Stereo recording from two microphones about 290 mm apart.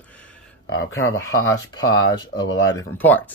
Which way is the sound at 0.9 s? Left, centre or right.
Left.